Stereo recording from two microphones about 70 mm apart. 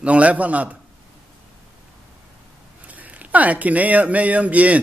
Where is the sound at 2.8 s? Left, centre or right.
Right.